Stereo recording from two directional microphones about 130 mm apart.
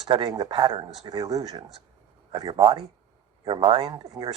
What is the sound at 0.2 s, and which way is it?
A man's voice, 35° right (ahead or behind).